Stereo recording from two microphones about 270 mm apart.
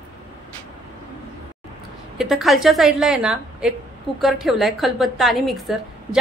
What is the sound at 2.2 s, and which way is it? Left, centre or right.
A woman's voice, centre.